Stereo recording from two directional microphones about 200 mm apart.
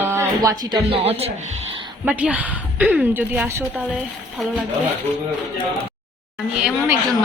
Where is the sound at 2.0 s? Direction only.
5° right (ahead or behind).